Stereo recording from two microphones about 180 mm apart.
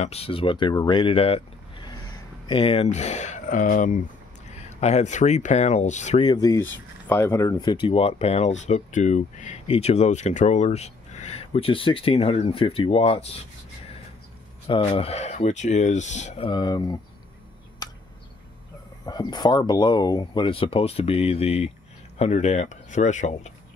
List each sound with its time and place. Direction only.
0.0 s speech: 35° left (ahead or behind)
4.7 s speech: 40° left (ahead or behind)
6.2 s speech: 20° left (ahead or behind)
14.7 s speech: 30° left (ahead or behind)
16.4 s speech: 25° left (ahead or behind)
17.8 s a sound: 20° left (ahead or behind)
19.0 s speech: 20° left (ahead or behind); by 23.5 s 40° left (ahead or behind)